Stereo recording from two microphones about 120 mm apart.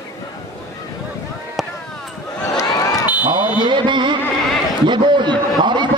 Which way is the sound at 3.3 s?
40° right (ahead or behind).